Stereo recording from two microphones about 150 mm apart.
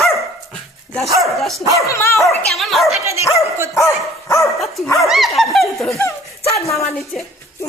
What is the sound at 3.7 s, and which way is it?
Dog, 20° left (ahead or behind).